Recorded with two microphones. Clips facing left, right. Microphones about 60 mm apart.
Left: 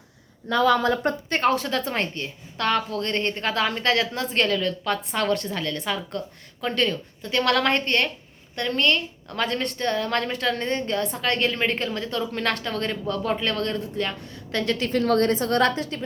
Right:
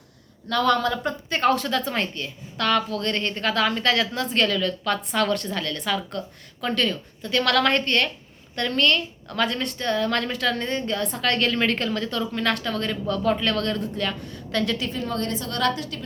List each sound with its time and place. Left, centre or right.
0.5 s a woman's voice: left
1.0 s speech: left
1.5 s a woman's voice: left
12.3 s a woman's voice: left
14.9 s a woman's voice: left
15.3 s speech: left